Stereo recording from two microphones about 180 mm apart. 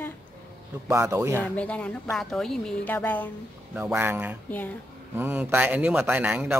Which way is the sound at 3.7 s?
10° right (ahead or behind).